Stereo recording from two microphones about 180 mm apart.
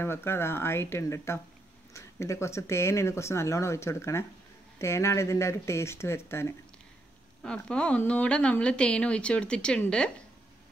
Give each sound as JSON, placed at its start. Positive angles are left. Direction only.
{"t": 0.0, "sound": "speech", "side_deg": 15}